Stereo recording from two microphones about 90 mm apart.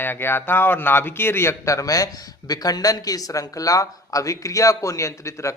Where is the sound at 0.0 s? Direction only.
25° left (ahead or behind).